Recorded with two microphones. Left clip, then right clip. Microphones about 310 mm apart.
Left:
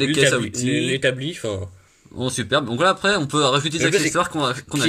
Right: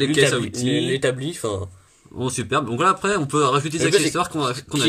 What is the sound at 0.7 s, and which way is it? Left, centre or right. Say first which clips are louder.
Speech: even; right.